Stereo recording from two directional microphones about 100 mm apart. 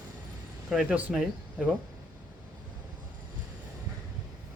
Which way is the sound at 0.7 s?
10° right (ahead or behind).